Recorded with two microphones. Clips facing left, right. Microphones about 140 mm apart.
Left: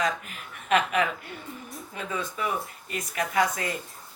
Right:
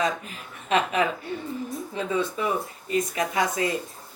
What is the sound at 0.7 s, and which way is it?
A woman's voice, 30° right (ahead or behind).